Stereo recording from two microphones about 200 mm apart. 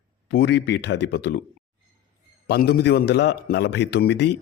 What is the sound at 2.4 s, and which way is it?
Speech, 55° left (ahead or behind).